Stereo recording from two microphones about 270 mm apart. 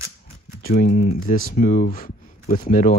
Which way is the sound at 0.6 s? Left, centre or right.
Left.